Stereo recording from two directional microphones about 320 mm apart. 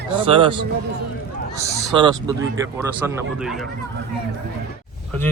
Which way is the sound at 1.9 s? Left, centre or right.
Centre.